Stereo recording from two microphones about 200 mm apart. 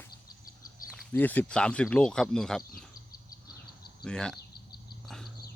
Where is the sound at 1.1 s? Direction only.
10° left (ahead or behind).